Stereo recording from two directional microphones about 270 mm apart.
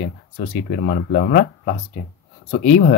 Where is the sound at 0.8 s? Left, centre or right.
Left.